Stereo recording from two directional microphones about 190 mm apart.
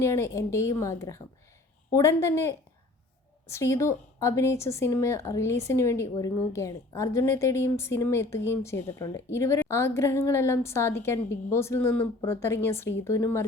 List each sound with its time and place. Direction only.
0.0 s speech: 15° left (ahead or behind)